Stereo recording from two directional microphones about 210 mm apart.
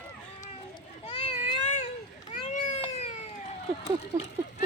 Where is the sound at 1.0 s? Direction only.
35° left (ahead or behind).